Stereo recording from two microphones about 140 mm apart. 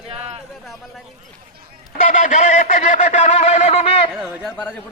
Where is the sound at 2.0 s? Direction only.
60° left (ahead or behind); by 4.0 s 45° left (ahead or behind).